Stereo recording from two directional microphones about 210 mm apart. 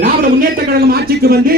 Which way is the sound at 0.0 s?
45° right (ahead or behind).